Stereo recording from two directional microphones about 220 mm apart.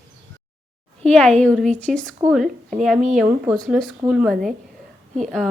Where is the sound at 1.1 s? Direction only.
5° left (ahead or behind).